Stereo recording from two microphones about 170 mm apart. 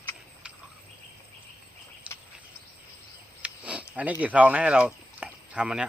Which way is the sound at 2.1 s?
5° right (ahead or behind).